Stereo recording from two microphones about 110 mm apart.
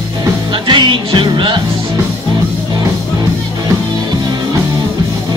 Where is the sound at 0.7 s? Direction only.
45° right (ahead or behind).